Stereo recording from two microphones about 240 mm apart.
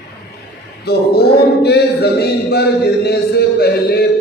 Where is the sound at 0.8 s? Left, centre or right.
Left.